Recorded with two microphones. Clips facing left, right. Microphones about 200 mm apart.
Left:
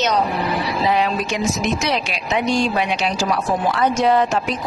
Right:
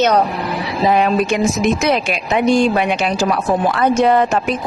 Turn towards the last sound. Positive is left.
turn(degrees=-55)  # may be behind; listen again after turning